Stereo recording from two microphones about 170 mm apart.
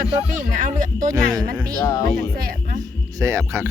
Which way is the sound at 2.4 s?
60° right (ahead or behind).